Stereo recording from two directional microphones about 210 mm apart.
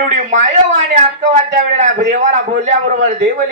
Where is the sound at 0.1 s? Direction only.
35° right (ahead or behind).